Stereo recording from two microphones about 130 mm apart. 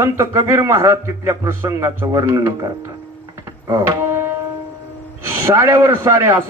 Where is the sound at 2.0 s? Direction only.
25° right (ahead or behind).